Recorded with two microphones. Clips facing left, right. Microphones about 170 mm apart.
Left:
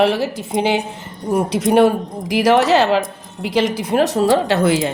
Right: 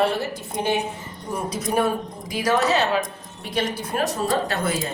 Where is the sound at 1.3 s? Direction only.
75° left (ahead or behind).